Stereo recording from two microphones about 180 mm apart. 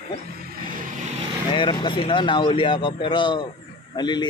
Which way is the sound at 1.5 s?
25° left (ahead or behind).